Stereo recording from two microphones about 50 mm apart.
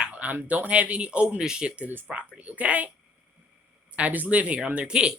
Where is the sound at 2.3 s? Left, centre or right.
Right.